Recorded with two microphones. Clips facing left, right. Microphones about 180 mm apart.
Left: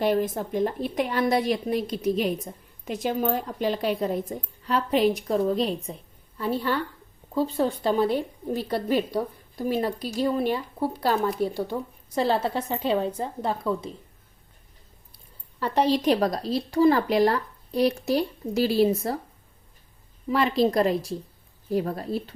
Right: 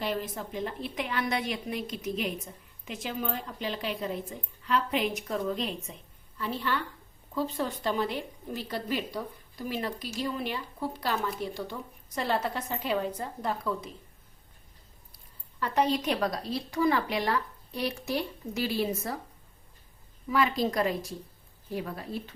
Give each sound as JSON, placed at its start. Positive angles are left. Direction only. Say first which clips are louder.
{"t": 0.0, "sound": "a woman's voice", "louder": "left 9 dB", "side_deg": 50}
{"t": 8.7, "sound": "a woman's voice", "louder": "left 8 dB", "side_deg": 50}
{"t": 9.1, "sound": "a woman's voice", "louder": "left 8 dB", "side_deg": 40}
{"t": 15.6, "sound": "a woman's voice", "louder": "left 5 dB", "side_deg": 30}
{"t": 20.2, "sound": "a woman's voice", "louder": "left 5 dB", "side_deg": 35}